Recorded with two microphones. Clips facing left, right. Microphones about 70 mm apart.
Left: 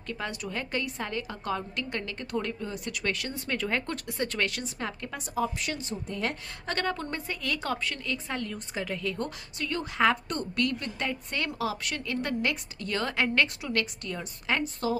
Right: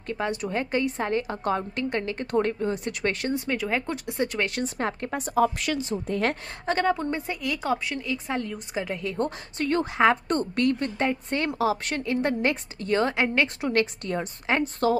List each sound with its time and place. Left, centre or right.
0.1 s a woman's voice: right
3.3 s a woman's voice: centre
4.6 s speech: right
5.6 s a woman's voice: right
6.6 s a woman's voice: centre
9.1 s a woman's voice: right; by 13.5 s centre
13.6 s a woman's voice: right
14.8 s speech: right